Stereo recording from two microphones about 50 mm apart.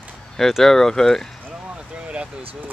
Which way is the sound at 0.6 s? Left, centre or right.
Centre.